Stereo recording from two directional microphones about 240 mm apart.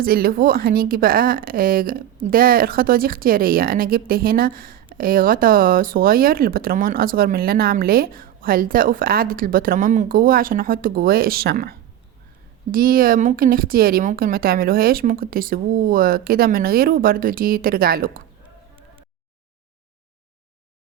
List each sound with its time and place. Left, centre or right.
0.0 s speech: right
12.7 s speech: right